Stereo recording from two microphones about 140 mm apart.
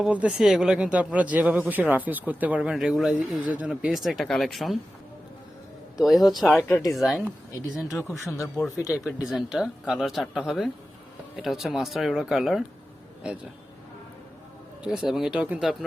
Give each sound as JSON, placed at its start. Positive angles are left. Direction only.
{"t": 0.0, "sound": "speech", "side_deg": -5}
{"t": 6.0, "sound": "speech", "side_deg": 0}
{"t": 6.7, "sound": "speech", "side_deg": 15}
{"t": 6.9, "sound": "speech", "side_deg": 0}
{"t": 7.9, "sound": "speech", "side_deg": 20}
{"t": 8.9, "sound": "speech", "side_deg": -5}
{"t": 14.8, "sound": "speech", "side_deg": -5}